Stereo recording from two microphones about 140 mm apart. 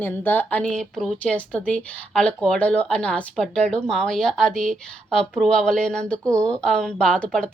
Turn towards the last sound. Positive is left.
turn(degrees=5)  # may be behind; listen again after turning